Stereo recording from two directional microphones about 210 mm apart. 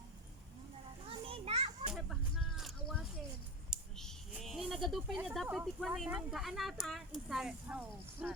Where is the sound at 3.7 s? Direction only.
Centre (ahead or behind).